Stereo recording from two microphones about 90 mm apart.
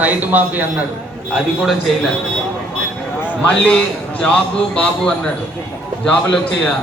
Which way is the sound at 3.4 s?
10° left (ahead or behind).